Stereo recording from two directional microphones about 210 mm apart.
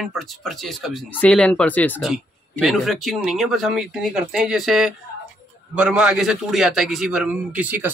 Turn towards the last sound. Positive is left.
turn(degrees=-5)  # may be behind; listen again after turning